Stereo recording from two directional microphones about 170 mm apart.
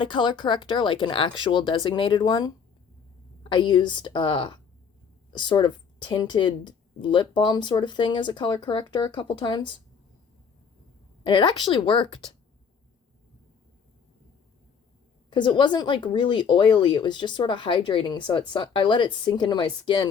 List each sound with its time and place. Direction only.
0.0 s speech: 30° left (ahead or behind)
11.2 s speech: 30° left (ahead or behind)
15.3 s speech: 30° left (ahead or behind)